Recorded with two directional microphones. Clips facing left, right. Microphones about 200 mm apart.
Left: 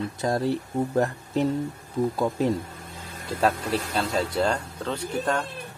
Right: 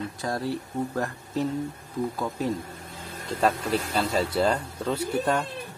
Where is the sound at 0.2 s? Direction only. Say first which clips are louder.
Left 5 dB; 25° left (ahead or behind).